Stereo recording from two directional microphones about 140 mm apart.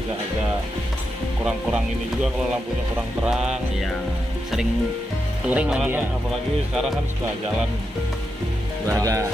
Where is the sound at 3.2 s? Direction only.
5° right (ahead or behind).